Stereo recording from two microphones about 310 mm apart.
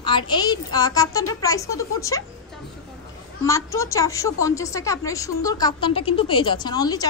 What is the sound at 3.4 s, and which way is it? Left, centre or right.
A woman's voice, centre.